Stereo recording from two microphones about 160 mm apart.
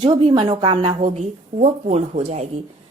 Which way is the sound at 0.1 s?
30° right (ahead or behind).